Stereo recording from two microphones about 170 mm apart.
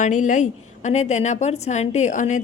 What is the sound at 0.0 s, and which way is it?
Speech, 45° left (ahead or behind).